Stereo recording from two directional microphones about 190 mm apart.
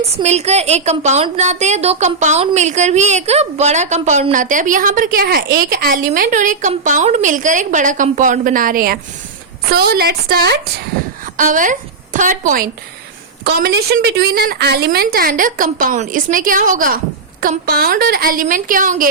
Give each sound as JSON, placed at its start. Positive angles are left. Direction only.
{"t": 0.2, "sound": "a woman's voice", "side_deg": -35}
{"t": 11.3, "sound": "a woman's voice", "side_deg": -45}
{"t": 13.4, "sound": "a woman's voice", "side_deg": -55}